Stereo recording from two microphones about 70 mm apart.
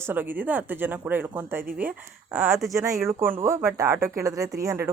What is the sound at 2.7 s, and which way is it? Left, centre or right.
A woman's voice, right.